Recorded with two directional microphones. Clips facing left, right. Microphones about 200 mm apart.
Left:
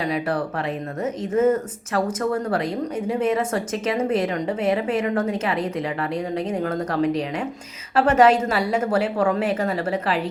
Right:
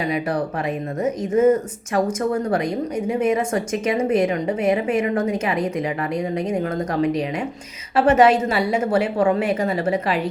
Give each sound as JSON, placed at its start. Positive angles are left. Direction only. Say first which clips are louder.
{"t": 0.0, "sound": "speech", "louder": "right 1 dB", "side_deg": -15}